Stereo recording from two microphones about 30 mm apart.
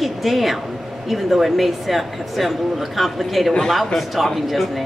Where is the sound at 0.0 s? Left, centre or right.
Centre.